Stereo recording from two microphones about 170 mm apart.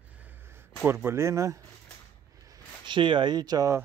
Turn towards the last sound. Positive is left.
turn(degrees=-20)  # may be behind; listen again after turning